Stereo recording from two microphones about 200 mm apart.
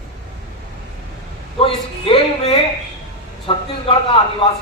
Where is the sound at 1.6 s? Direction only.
25° left (ahead or behind).